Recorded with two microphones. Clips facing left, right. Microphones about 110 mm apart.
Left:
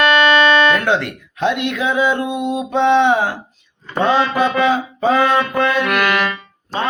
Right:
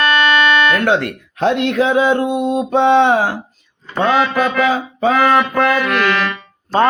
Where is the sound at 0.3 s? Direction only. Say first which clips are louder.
Left 1 dB; 15° left (ahead or behind).